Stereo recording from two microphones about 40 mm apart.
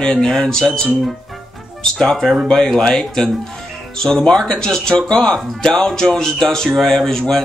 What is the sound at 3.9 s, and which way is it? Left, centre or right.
Speech, centre.